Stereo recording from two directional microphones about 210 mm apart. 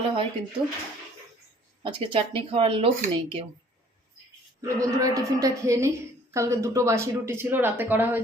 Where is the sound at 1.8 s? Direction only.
25° right (ahead or behind).